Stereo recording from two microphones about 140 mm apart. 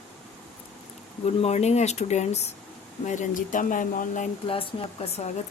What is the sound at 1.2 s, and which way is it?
Speech, 50° left (ahead or behind).